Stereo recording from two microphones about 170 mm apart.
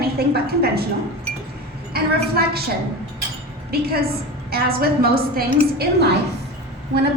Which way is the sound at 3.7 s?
65° right (ahead or behind).